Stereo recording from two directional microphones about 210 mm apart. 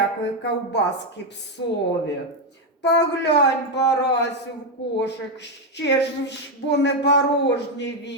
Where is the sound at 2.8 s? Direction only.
55° left (ahead or behind).